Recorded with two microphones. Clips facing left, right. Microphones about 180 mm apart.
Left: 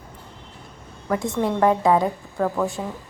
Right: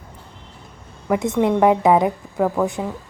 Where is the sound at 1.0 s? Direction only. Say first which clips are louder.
Right 5 dB; 20° right (ahead or behind).